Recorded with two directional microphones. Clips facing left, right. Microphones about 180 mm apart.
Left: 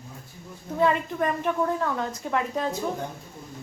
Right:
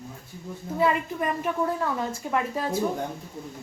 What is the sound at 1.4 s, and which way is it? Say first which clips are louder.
A woman's voice: left 1 dB; 5° right (ahead or behind).